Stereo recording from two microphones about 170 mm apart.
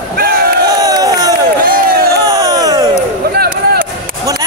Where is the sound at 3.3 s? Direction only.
65° right (ahead or behind).